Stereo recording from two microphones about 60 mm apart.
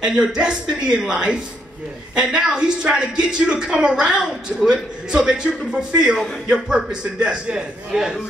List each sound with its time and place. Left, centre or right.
0.0 s speech: centre